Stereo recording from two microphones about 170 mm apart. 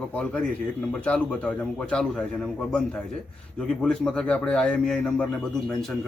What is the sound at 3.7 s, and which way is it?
A man's voice, 5° left (ahead or behind).